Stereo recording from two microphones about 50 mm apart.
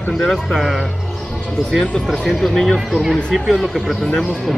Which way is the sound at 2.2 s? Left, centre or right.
Centre.